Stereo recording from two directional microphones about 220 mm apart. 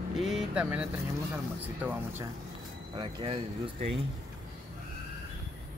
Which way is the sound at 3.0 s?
20° right (ahead or behind).